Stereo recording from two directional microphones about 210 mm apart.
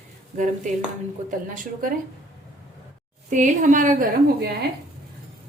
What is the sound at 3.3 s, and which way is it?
Speech, 35° right (ahead or behind).